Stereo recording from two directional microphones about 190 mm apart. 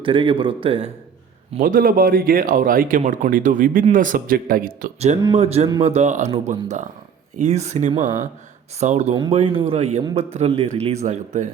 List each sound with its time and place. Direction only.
0.0 s a man's voice: 25° right (ahead or behind)
1.6 s speech: 45° right (ahead or behind)
5.3 s speech: 35° right (ahead or behind)